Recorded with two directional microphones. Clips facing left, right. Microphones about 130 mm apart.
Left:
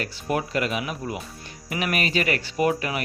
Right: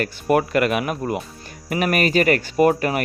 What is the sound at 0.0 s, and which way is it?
Speech, 60° right (ahead or behind).